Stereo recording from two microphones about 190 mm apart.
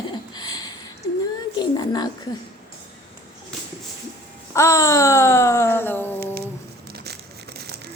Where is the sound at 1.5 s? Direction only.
20° left (ahead or behind).